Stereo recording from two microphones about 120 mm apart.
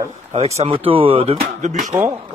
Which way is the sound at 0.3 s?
65° right (ahead or behind).